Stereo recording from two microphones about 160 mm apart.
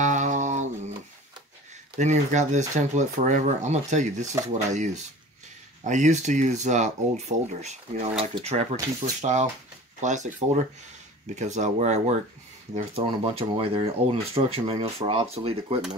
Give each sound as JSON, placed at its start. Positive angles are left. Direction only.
{"t": 0.0, "sound": "humming", "side_deg": -50}
{"t": 2.0, "sound": "speech", "side_deg": -50}